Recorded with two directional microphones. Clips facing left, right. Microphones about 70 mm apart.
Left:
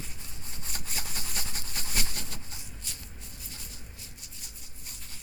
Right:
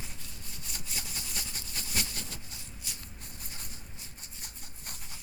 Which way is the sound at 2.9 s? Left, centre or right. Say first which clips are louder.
Right 1 dB; centre.